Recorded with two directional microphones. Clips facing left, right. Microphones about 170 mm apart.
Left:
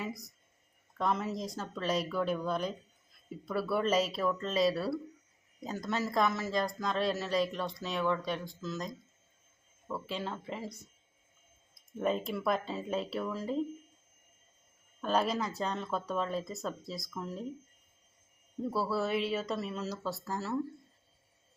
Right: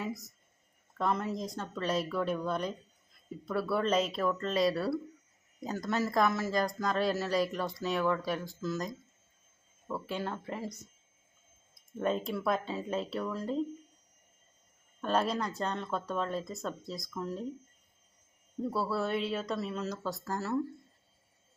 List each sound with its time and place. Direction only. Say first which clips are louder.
0.0 s speech: right 2 dB; centre (ahead or behind)
11.7 s speech: even; centre (ahead or behind)
15.0 s speech: even; centre (ahead or behind)
18.6 s speech: even; centre (ahead or behind)